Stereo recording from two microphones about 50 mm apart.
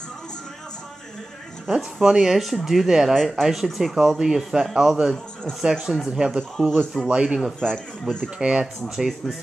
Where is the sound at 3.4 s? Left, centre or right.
Centre.